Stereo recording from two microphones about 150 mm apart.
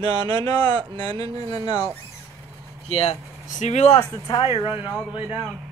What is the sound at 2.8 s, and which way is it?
Speech, 45° left (ahead or behind).